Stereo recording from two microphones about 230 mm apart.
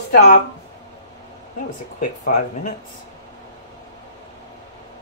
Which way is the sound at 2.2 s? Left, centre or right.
Left.